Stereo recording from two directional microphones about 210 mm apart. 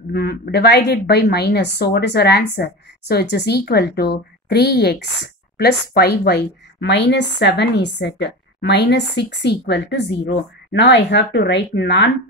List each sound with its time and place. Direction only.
0.1 s a woman's voice: 50° left (ahead or behind)